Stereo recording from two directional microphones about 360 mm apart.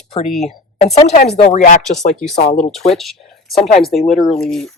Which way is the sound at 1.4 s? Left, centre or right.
Left.